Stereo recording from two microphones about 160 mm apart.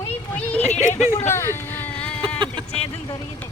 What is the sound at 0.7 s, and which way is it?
Speech, 45° left (ahead or behind).